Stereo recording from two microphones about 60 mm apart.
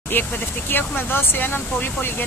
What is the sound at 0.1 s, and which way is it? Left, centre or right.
Speech, left.